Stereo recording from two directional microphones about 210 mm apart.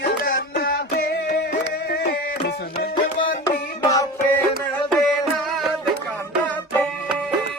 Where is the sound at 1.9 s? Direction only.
50° left (ahead or behind).